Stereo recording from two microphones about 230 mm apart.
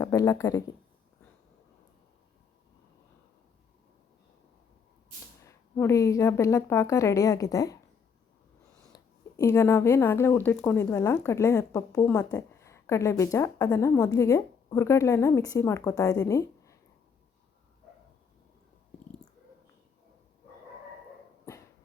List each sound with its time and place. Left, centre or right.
0.0 s speech: centre
5.5 s speech: centre
8.9 s a sound: centre
9.4 s speech: centre
21.5 s dog: centre